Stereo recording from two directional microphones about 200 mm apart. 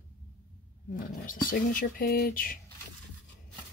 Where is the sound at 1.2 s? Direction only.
45° left (ahead or behind).